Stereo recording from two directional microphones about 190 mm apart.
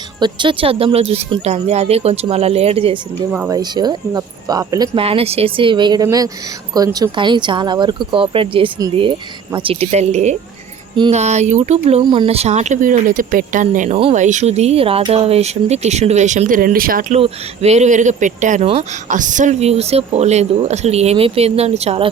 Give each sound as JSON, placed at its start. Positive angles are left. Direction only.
{"t": 0.2, "sound": "speech", "side_deg": -25}
{"t": 3.3, "sound": "speech", "side_deg": -10}
{"t": 3.6, "sound": "speech", "side_deg": -20}
{"t": 4.9, "sound": "speech", "side_deg": -30}
{"t": 12.0, "sound": "speech", "side_deg": -25}
{"t": 17.2, "sound": "speech", "side_deg": -30}